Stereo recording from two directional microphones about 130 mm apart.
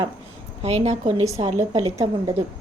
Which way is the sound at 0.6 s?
60° right (ahead or behind).